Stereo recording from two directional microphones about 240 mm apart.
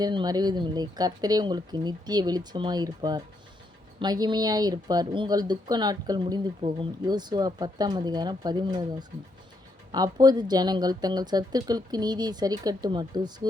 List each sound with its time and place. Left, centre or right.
0.0 s speech: centre